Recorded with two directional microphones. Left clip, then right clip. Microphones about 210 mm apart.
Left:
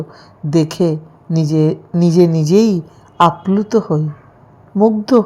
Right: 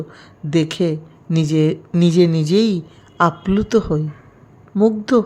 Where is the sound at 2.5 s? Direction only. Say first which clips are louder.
Left 4 dB; 5° left (ahead or behind).